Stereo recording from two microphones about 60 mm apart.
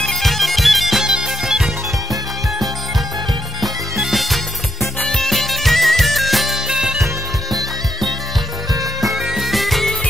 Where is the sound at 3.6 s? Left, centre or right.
Centre.